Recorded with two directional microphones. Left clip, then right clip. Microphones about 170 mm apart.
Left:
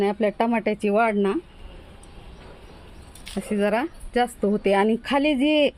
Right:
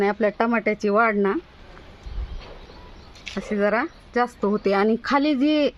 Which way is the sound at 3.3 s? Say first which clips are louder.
Right 1 dB; 45° left (ahead or behind).